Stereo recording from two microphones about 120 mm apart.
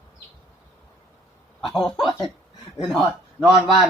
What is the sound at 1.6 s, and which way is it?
Speech, 45° left (ahead or behind).